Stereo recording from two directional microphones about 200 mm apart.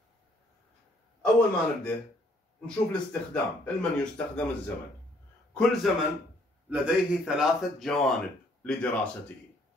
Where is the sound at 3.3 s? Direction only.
5° left (ahead or behind).